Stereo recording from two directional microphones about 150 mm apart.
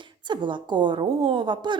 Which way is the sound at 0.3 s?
30° right (ahead or behind).